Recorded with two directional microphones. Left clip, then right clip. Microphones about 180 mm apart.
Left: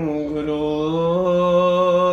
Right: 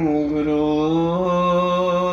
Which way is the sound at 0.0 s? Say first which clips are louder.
Right 3 dB; 20° left (ahead or behind).